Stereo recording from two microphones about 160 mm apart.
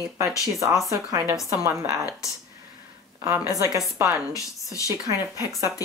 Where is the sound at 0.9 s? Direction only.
15° right (ahead or behind).